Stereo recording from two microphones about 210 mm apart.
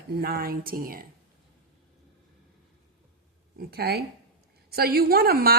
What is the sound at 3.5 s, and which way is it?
A woman's voice, 50° right (ahead or behind).